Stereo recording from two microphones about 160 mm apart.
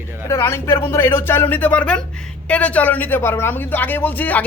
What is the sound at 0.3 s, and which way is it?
Speech, 15° left (ahead or behind).